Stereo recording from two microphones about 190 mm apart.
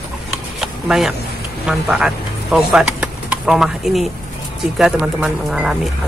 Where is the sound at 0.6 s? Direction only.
Centre (ahead or behind).